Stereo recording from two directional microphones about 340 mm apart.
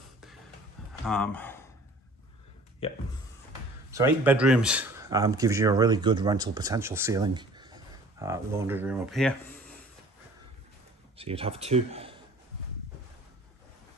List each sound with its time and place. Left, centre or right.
1.0 s speech: centre
3.9 s speech: centre
11.1 s speech: centre